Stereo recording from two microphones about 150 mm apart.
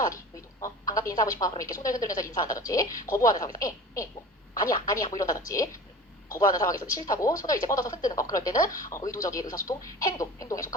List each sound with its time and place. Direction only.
0.6 s speech: 20° left (ahead or behind)